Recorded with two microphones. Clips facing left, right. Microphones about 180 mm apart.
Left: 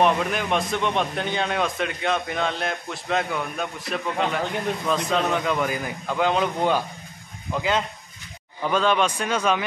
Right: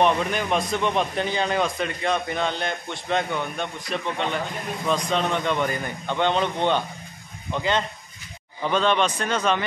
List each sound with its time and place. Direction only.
0.0 s a man's voice: centre (ahead or behind)